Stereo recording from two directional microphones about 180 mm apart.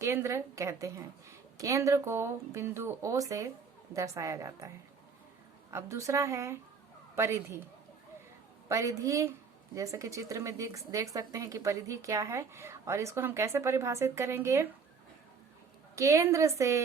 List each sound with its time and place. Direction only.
0.0 s a woman's voice: 15° right (ahead or behind)
5.7 s a woman's voice: 15° right (ahead or behind)
8.7 s a woman's voice: 15° right (ahead or behind)
16.0 s a woman's voice: 15° right (ahead or behind)